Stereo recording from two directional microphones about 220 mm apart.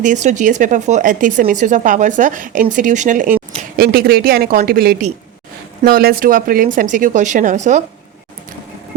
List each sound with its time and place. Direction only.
0.0 s speech: 35° right (ahead or behind)